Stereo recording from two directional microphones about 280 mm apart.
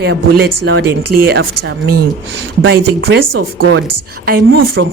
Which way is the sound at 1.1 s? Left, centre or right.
Right.